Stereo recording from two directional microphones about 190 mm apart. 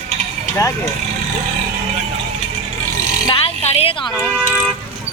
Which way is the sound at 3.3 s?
30° left (ahead or behind).